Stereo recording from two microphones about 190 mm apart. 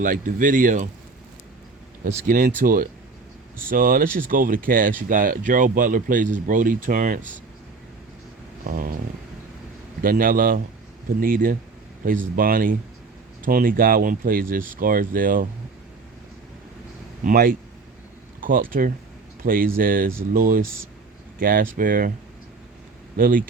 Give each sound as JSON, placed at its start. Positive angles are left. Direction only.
{"t": 0.0, "sound": "speech", "side_deg": -45}
{"t": 2.2, "sound": "speech", "side_deg": -45}
{"t": 8.6, "sound": "speech", "side_deg": -50}
{"t": 10.0, "sound": "speech", "side_deg": -50}
{"t": 17.2, "sound": "speech", "side_deg": -50}
{"t": 23.1, "sound": "speech", "side_deg": -50}